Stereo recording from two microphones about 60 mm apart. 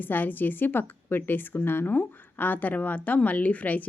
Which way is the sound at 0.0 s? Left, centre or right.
Left.